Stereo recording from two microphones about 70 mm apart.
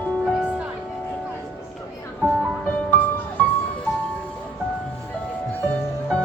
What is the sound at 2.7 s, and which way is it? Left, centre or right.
Music, centre.